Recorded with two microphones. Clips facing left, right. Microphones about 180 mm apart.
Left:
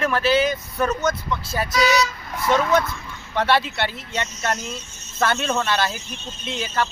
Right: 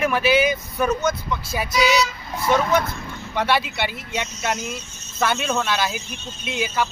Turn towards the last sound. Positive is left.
turn(degrees=-10)  # may be behind; listen again after turning